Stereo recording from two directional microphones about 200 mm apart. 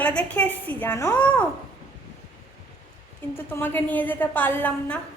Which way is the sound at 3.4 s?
10° left (ahead or behind).